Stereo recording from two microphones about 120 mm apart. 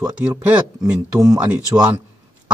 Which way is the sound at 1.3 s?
10° right (ahead or behind).